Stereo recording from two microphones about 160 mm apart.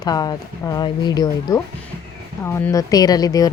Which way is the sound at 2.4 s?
15° left (ahead or behind).